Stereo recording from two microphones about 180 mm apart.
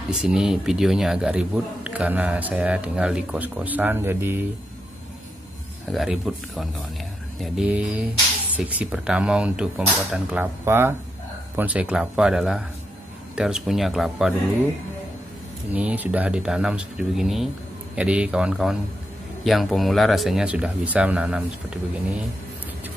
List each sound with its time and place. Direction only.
0.2 s a man's voice: 5° right (ahead or behind)
5.9 s a man's voice: centre (ahead or behind)
15.7 s speech: 10° right (ahead or behind)